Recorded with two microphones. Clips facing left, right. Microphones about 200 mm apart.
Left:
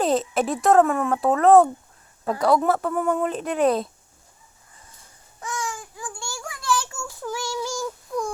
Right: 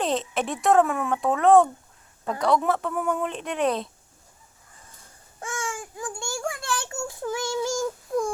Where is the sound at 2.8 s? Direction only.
Centre (ahead or behind).